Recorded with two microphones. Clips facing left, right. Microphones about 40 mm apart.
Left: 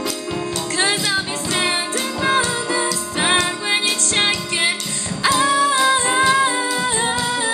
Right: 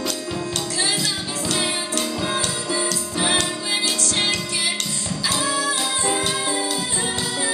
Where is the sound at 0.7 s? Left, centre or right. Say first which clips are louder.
Left 7 dB; left.